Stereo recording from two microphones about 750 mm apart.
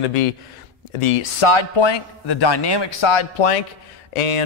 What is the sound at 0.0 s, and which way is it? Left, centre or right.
Speech, left.